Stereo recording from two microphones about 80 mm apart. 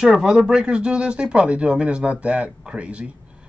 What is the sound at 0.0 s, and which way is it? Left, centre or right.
Speech, centre.